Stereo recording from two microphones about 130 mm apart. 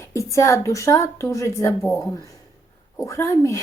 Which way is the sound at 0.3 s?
25° left (ahead or behind).